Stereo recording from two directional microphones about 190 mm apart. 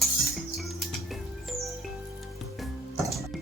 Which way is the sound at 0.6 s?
Centre (ahead or behind).